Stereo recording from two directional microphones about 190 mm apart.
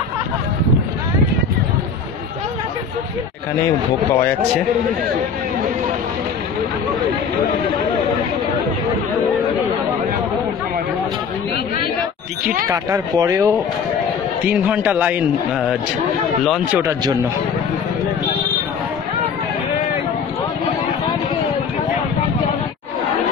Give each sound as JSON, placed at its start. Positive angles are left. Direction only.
{"t": 4.1, "sound": "a man's voice", "side_deg": 10}
{"t": 12.4, "sound": "a man's voice", "side_deg": -15}
{"t": 16.7, "sound": "a man's voice", "side_deg": -15}